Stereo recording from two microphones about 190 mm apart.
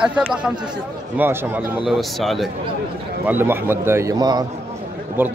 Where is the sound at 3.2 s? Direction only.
10° right (ahead or behind).